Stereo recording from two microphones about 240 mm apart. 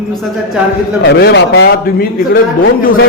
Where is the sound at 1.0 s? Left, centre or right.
Left.